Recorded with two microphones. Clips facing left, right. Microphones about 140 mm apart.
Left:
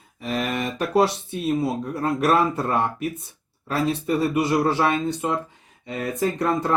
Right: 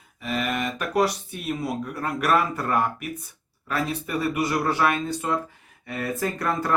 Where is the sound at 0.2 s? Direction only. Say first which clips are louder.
Left 1 dB; 35° left (ahead or behind).